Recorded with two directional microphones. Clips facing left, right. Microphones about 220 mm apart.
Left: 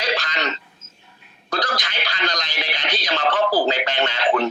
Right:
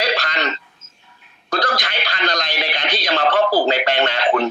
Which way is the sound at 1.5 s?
60° right (ahead or behind).